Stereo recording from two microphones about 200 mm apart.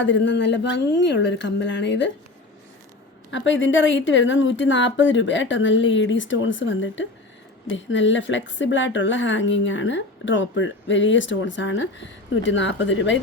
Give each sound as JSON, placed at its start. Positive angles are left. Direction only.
{"t": 0.0, "sound": "speech", "side_deg": 65}
{"t": 3.3, "sound": "speech", "side_deg": 65}